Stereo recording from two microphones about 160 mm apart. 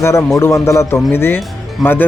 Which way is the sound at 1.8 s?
Centre (ahead or behind).